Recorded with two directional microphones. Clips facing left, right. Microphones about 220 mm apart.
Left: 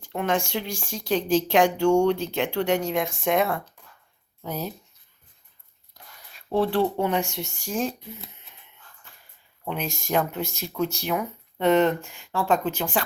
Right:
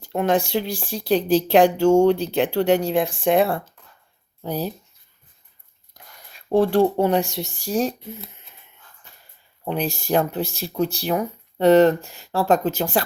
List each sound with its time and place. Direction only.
0.0 s speech: 35° right (ahead or behind)
6.0 s a sound: 45° right (ahead or behind)
6.5 s speech: 45° right (ahead or behind)
9.6 s speech: 35° right (ahead or behind)